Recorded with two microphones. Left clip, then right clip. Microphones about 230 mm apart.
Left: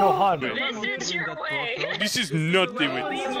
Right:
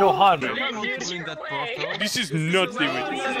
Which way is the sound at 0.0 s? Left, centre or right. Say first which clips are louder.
Right 3 dB; right.